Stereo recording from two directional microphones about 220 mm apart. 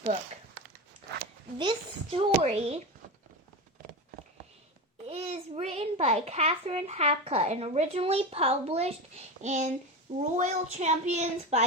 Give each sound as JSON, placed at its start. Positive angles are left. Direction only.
{"t": 1.5, "sound": "a child's voice", "side_deg": -25}
{"t": 5.0, "sound": "a child's voice", "side_deg": -25}